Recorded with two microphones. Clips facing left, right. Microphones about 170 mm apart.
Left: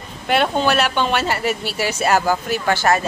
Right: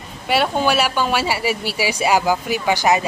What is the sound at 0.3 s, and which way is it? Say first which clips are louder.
Speech: even; 10° right (ahead or behind).